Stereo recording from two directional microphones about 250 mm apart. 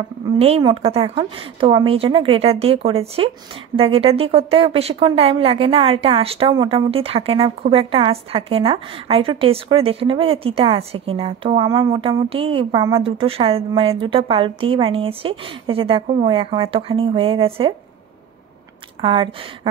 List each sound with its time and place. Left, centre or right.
0.4 s a woman's voice: right
18.9 s a woman's voice: centre